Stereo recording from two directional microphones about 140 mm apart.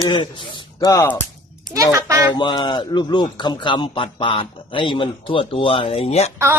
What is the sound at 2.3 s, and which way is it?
Speech, 35° left (ahead or behind).